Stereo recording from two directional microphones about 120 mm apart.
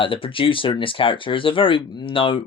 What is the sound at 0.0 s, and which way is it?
Speech, 45° left (ahead or behind).